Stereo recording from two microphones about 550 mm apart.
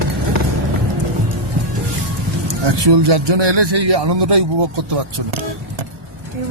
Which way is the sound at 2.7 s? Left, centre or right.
Right.